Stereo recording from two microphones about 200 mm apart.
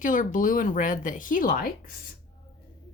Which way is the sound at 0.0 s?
40° left (ahead or behind).